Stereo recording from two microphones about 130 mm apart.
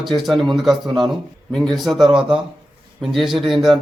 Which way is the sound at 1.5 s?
5° left (ahead or behind).